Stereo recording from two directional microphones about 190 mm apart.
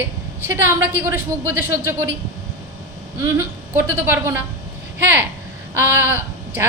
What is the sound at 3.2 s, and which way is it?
A woman's voice, 15° right (ahead or behind).